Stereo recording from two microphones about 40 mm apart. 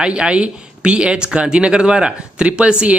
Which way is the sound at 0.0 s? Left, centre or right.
Right.